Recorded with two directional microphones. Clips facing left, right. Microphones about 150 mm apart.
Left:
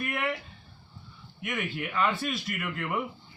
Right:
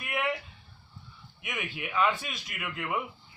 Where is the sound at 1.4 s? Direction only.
10° right (ahead or behind).